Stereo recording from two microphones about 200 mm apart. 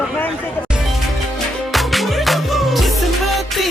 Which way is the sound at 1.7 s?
Centre (ahead or behind).